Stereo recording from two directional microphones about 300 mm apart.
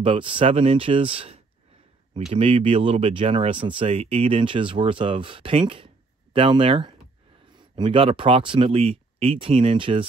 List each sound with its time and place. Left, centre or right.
0.0 s speech: centre